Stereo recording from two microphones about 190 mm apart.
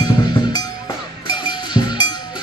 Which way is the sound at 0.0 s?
25° left (ahead or behind).